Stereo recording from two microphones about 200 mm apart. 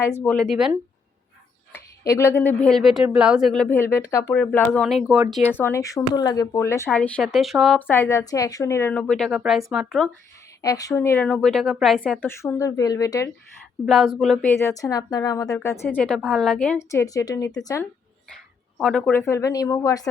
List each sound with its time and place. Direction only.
0.2 s speech: 5° left (ahead or behind)
2.0 s speech: 15° left (ahead or behind); by 5.4 s 5° right (ahead or behind)
5.5 s speech: 10° left (ahead or behind)
10.6 s speech: 15° left (ahead or behind)
13.8 s speech: centre (ahead or behind)
14.5 s speech: 15° left (ahead or behind)
18.8 s speech: centre (ahead or behind); by 20.1 s 20° left (ahead or behind)